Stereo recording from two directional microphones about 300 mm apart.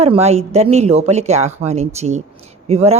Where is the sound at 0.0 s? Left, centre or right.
Right.